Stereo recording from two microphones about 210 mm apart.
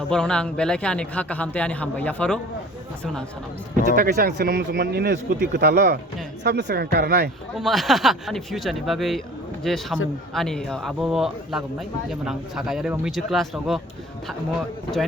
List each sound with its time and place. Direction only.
0.1 s speech: 5° left (ahead or behind)
3.9 s speech: 45° right (ahead or behind)
7.6 s speech: centre (ahead or behind)